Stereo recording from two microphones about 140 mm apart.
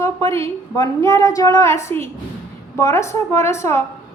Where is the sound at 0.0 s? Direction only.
20° left (ahead or behind).